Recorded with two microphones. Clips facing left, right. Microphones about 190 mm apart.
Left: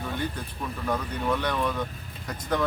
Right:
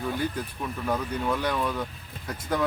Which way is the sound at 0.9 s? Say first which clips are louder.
Even; 10° right (ahead or behind).